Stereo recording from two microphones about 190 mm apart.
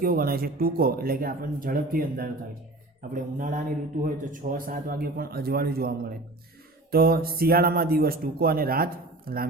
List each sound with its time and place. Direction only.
0.0 s speech: 50° right (ahead or behind)